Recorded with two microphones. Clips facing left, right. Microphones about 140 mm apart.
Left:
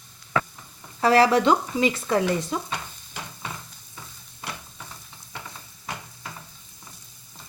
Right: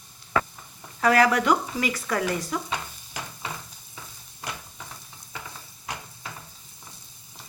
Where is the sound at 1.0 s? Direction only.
30° left (ahead or behind).